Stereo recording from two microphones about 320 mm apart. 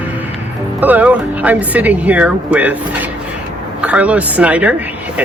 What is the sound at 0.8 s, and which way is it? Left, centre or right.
Speech, centre.